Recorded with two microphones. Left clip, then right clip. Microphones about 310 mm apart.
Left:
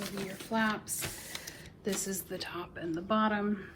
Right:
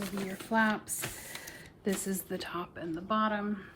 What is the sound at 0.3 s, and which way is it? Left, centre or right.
Speech, right.